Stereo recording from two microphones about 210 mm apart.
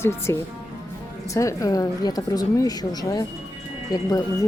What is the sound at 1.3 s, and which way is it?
A woman's voice, 15° left (ahead or behind).